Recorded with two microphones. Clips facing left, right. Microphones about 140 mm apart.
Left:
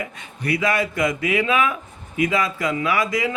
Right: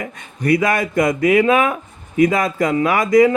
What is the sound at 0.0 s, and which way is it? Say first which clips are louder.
Speech: right 6 dB; 45° right (ahead or behind).